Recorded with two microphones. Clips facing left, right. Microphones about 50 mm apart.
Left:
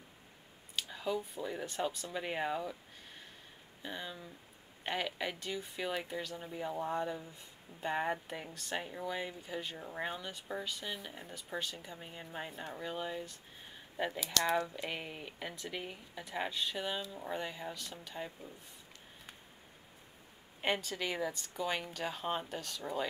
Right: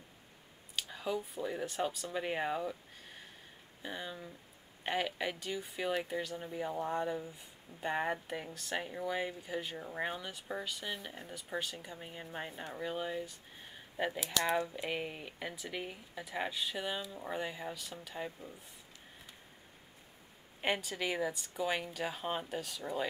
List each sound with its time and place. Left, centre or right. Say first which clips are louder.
0.7 s speech: even; centre
3.8 s speech: right 1 dB; centre
20.6 s speech: even; centre